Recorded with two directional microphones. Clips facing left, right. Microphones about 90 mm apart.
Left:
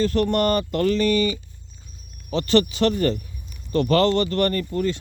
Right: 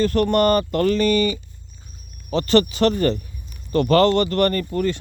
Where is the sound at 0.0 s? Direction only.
55° right (ahead or behind).